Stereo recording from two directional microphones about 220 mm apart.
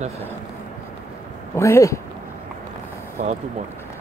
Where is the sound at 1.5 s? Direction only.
15° left (ahead or behind).